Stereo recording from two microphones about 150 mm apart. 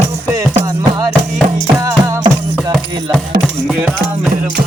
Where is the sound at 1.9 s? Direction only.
25° right (ahead or behind).